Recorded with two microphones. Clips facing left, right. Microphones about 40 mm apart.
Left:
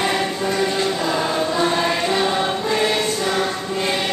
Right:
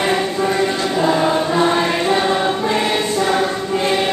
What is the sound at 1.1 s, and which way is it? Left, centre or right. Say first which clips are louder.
Choir: right 4 dB; right.